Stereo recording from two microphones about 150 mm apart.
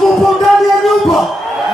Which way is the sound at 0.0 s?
Centre (ahead or behind).